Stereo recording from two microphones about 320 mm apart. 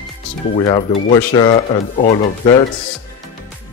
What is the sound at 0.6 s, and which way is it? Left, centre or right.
Speech, centre.